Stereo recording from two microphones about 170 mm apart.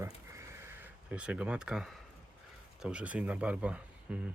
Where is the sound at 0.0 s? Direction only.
15° right (ahead or behind).